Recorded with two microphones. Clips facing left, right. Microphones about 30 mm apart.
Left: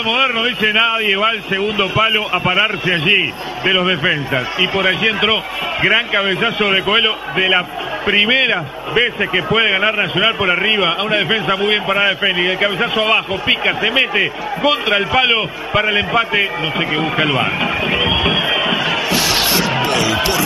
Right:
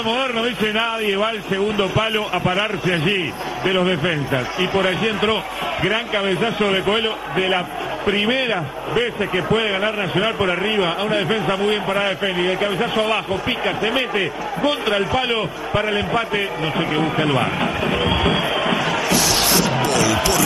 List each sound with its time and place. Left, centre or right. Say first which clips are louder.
0.0 s a man's voice: left 5 dB; centre
9.2 s a man's voice: left 4 dB; centre
16.1 s a sound: left 5 dB; centre